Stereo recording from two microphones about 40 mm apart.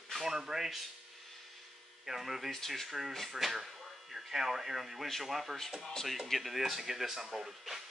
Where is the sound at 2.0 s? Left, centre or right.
Centre.